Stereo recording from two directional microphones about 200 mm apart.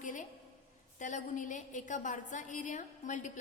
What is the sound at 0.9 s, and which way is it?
A woman's voice, 40° left (ahead or behind).